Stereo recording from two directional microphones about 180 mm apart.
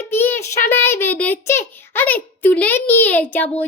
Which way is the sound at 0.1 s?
10° left (ahead or behind).